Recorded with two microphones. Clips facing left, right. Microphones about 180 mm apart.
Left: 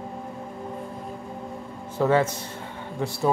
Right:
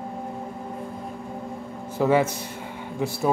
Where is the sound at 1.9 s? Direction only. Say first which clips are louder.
Right 1 dB; 10° right (ahead or behind).